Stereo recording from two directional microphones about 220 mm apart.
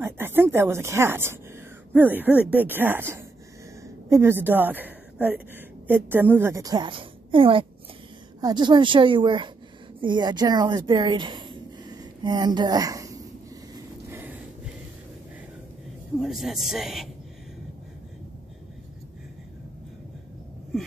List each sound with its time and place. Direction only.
0.0 s a woman's voice: 10° right (ahead or behind)
14.1 s a sound: 10° right (ahead or behind)
16.2 s a woman's voice: centre (ahead or behind)